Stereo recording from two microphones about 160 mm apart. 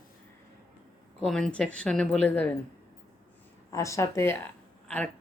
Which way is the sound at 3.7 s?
20° left (ahead or behind).